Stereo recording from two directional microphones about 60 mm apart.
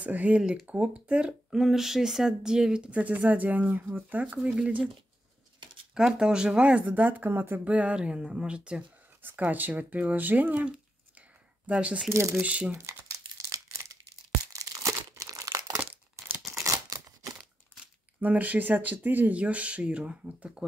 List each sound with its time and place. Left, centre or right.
0.0 s speech: right
1.6 s speech: centre
5.9 s speech: centre; by 7.6 s right
7.6 s speech: right
9.2 s speech: right
12.1 s speech: right
12.4 s speech: right
13.5 s crumpling: right
16.4 s scissors: right
18.2 s speech: right